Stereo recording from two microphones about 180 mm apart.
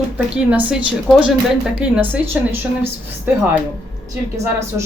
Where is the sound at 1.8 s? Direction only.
10° right (ahead or behind).